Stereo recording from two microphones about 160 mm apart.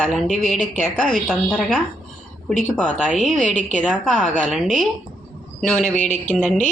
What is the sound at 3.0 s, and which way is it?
A woman's voice, centre (ahead or behind).